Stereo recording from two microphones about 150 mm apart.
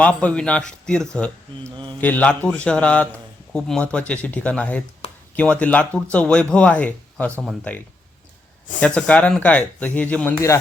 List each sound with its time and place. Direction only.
0.0 s a man's voice: 10° left (ahead or behind)
1.7 s mantra: 30° right (ahead or behind)
2.0 s a man's voice: 10° left (ahead or behind)